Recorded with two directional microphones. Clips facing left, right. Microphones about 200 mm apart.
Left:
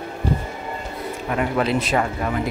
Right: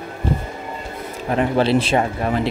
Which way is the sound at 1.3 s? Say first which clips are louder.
Right 4 dB; 30° right (ahead or behind).